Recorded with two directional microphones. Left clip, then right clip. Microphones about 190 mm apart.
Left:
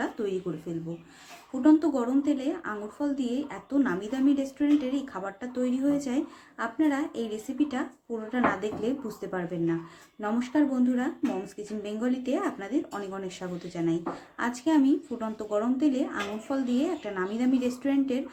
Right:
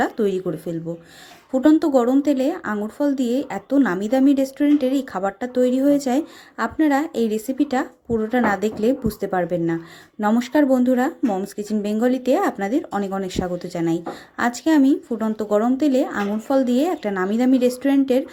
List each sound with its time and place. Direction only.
1.6 s a woman's voice: 40° right (ahead or behind)